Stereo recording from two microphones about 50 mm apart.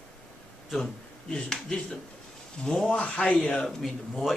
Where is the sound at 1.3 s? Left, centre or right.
Centre.